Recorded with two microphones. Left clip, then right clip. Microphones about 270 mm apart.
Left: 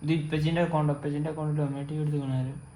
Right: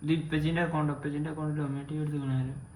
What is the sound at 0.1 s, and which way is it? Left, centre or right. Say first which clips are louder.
A man's voice: left 1 dB; left.